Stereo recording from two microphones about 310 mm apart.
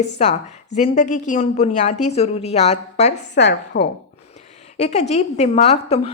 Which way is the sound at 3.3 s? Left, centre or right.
Left.